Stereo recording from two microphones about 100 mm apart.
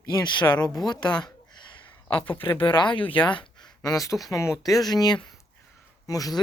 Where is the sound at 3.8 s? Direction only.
35° left (ahead or behind).